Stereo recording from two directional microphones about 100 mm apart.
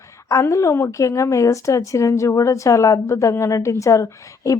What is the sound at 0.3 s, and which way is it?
Speech, 35° left (ahead or behind).